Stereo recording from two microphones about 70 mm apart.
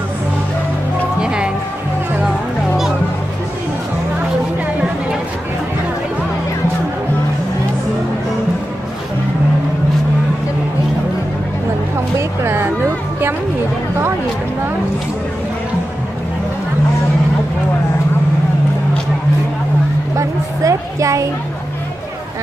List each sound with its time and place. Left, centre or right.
1.2 s music: centre
12.2 s music: right
20.2 s a sound: right